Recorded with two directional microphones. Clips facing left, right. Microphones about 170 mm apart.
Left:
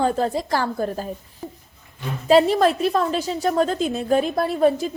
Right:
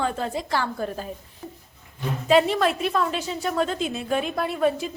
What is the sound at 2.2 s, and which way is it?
A woman's voice, 35° left (ahead or behind).